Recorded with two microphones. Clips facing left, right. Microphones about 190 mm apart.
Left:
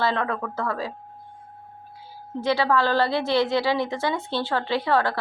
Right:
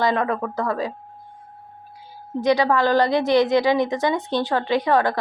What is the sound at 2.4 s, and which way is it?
A woman's voice, 15° right (ahead or behind).